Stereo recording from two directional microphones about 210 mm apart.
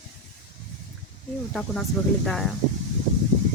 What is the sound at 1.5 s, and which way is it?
Speech, centre (ahead or behind).